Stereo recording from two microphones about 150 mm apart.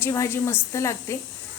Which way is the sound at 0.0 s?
20° left (ahead or behind).